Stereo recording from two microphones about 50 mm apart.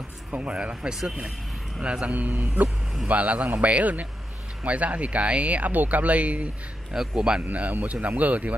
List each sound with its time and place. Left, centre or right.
0.4 s speech: right
6.9 s speech: centre
7.4 s speech: right